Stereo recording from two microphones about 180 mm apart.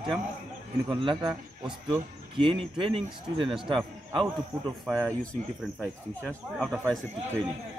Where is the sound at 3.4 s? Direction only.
Centre (ahead or behind).